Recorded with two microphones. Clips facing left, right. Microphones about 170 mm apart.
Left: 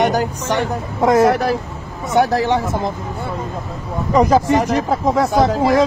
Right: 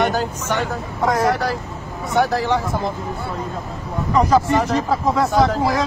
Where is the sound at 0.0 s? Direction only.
15° left (ahead or behind).